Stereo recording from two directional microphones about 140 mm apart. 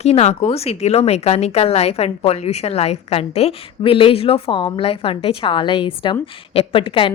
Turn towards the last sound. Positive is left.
turn(degrees=40)  # may be behind; listen again after turning